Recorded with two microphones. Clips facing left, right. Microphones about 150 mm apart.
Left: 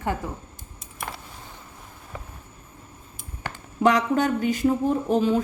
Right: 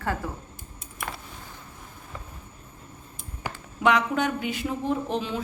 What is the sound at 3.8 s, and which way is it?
Speech, 40° left (ahead or behind).